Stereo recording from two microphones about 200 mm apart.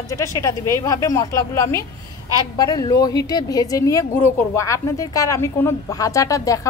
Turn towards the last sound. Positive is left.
turn(degrees=15)  # may be behind; listen again after turning